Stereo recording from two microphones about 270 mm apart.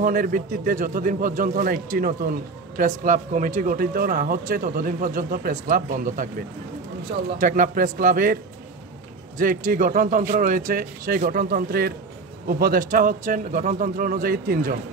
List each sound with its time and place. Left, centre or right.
0.0 s speech: right
7.3 s speech: right
9.4 s speech: right